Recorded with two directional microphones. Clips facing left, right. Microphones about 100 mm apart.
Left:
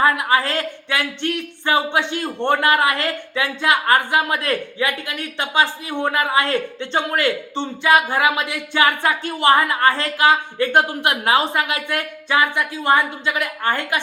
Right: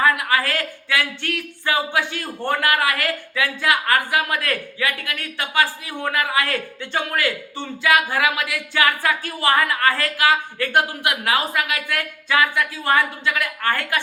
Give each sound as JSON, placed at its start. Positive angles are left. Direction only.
{"t": 0.0, "sound": "speech", "side_deg": 25}